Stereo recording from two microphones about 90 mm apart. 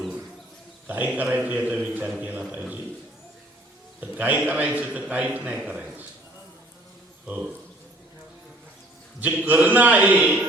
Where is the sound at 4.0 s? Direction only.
15° right (ahead or behind).